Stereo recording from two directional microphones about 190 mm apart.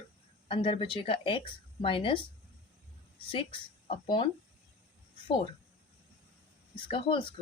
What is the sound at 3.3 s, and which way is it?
Speech, 30° left (ahead or behind).